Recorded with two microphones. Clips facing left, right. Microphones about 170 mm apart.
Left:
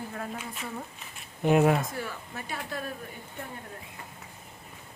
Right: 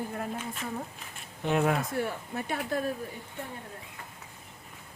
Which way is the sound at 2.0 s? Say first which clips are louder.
Right 5 dB; 55° right (ahead or behind).